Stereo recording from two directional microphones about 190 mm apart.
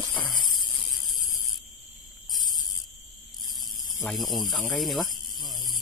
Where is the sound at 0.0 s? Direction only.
25° left (ahead or behind).